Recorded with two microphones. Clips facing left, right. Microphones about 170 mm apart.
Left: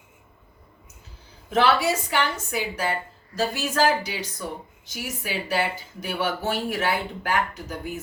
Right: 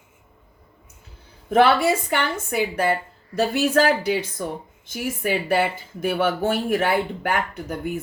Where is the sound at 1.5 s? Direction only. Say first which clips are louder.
Right 4 dB; 55° right (ahead or behind).